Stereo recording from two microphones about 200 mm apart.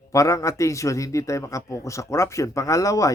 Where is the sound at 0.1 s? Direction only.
15° left (ahead or behind).